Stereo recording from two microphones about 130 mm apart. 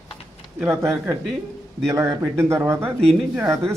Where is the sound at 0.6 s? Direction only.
15° right (ahead or behind).